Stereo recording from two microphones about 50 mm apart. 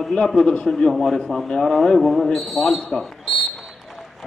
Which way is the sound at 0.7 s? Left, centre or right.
Centre.